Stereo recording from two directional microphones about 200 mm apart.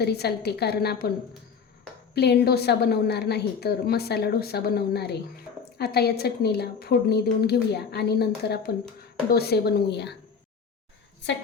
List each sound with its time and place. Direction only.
0.0 s a woman's voice: 55° left (ahead or behind)
2.1 s a woman's voice: 55° left (ahead or behind)